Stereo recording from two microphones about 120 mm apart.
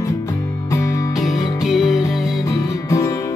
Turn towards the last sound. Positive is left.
turn(degrees=25)  # may be behind; listen again after turning